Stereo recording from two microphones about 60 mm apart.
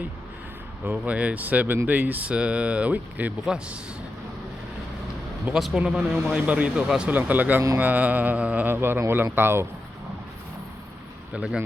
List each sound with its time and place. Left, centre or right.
0.9 s speech: right
2.3 s speech: centre
3.4 s a man's voice: centre
5.5 s speech: centre
6.4 s speech: right
6.8 s a man's voice: centre
7.1 s speech: right
8.6 s speech: right